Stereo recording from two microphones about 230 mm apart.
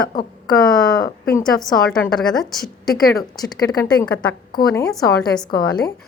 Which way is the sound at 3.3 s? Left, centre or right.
Centre.